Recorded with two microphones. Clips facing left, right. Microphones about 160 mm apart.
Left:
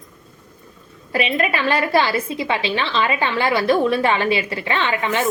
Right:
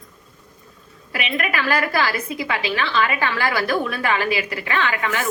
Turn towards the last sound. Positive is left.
turn(degrees=25)  # may be behind; listen again after turning